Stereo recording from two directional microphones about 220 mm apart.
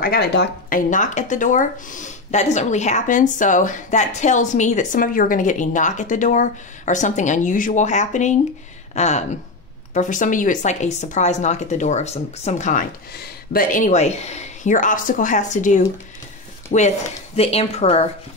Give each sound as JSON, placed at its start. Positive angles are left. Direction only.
{"t": 0.0, "sound": "speech", "side_deg": 45}